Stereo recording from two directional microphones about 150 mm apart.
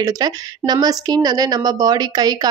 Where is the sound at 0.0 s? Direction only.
25° right (ahead or behind).